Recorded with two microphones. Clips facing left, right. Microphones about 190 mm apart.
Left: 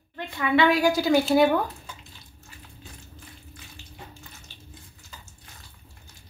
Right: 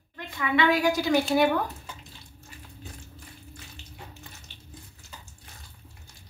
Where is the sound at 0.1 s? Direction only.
30° left (ahead or behind).